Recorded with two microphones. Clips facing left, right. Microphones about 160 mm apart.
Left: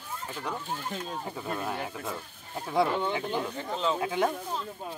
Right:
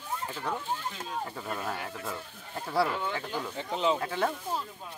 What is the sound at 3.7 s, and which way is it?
Speech, 15° right (ahead or behind).